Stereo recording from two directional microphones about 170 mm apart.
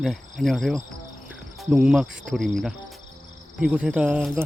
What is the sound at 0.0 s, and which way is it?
Cricket, centre (ahead or behind).